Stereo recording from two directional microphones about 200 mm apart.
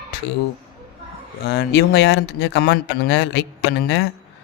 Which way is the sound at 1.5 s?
55° left (ahead or behind).